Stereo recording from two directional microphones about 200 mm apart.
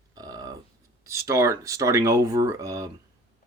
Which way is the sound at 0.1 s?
20° right (ahead or behind).